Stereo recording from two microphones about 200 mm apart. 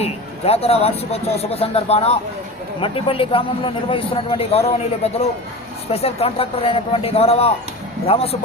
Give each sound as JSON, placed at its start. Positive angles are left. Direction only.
{"t": 0.0, "sound": "a man's voice", "side_deg": 30}